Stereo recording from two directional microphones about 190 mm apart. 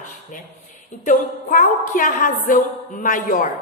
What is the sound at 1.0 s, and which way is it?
A woman's voice, 45° left (ahead or behind).